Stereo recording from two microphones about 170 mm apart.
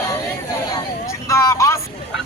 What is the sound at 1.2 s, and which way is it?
Vehicle, 20° left (ahead or behind).